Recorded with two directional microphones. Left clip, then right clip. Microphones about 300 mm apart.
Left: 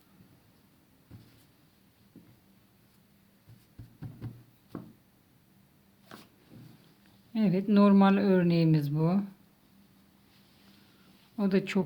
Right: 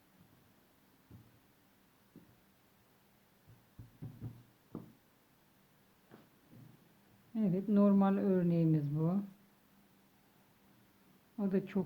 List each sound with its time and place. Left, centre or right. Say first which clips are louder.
7.3 s speech: left 7 dB; centre
11.3 s speech: left 8 dB; centre